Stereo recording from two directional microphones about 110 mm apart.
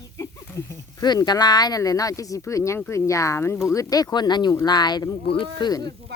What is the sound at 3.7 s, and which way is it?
Speech, 35° left (ahead or behind).